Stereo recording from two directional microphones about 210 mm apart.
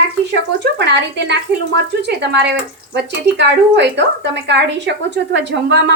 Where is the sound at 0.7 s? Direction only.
55° right (ahead or behind).